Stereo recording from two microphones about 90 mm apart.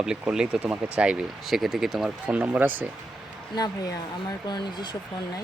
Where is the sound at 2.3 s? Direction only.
15° right (ahead or behind).